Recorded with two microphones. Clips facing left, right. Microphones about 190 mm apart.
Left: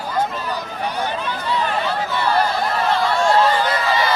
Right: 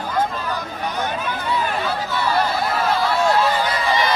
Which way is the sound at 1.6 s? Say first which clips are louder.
Left 1 dB; 10° right (ahead or behind).